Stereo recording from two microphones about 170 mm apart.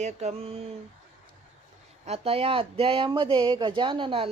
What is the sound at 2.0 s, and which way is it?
Speech, 35° right (ahead or behind).